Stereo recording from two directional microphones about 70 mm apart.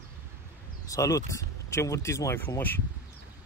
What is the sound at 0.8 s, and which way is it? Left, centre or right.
Speech, left.